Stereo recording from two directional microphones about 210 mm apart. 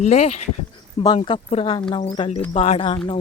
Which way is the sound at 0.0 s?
30° left (ahead or behind).